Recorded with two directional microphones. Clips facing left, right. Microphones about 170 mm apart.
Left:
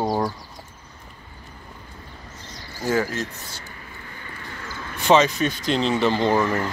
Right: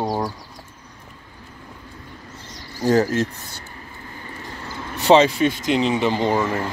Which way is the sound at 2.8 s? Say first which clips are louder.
Right 6 dB; 40° right (ahead or behind).